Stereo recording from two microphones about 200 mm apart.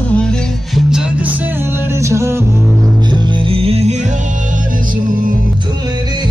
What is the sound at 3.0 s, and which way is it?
Music, 20° right (ahead or behind).